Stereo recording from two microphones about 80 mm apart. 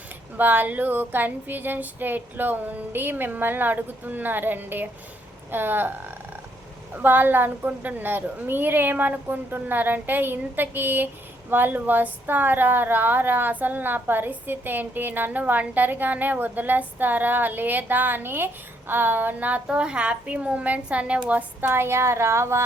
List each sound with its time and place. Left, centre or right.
0.3 s speech: right
6.9 s a woman's voice: right